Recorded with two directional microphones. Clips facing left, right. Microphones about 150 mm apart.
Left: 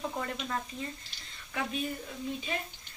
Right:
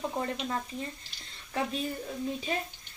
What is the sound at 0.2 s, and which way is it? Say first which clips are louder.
Speech: right 3 dB; 25° right (ahead or behind).